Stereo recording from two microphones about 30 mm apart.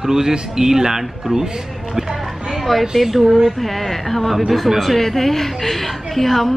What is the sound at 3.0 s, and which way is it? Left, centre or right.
A woman's voice, centre.